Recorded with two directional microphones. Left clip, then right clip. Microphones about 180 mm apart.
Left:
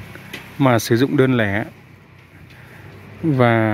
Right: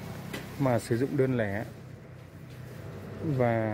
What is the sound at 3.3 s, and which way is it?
Speech, 25° left (ahead or behind).